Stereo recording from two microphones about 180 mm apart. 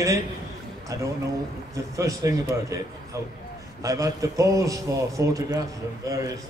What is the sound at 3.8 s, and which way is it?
A man's voice, 20° right (ahead or behind).